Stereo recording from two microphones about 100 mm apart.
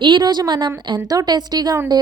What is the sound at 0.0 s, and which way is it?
A woman's voice, 50° right (ahead or behind).